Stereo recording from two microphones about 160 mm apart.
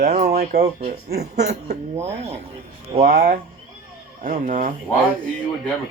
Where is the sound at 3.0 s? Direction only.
65° right (ahead or behind).